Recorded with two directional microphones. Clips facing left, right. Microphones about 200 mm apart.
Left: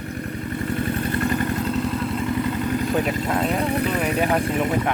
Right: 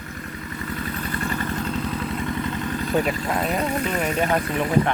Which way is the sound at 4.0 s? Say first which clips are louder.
Left 1 dB; 10° left (ahead or behind).